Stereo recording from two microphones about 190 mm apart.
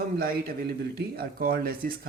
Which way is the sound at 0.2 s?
55° right (ahead or behind).